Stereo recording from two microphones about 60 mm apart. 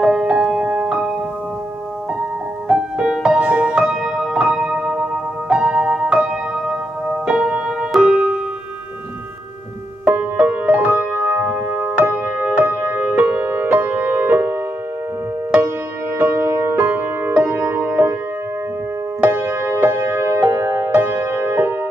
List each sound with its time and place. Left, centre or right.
0.0 s music: centre
2.7 s music: centre
10.1 s music: right
16.2 s music: right
19.2 s music: right
20.4 s music: right
20.9 s music: right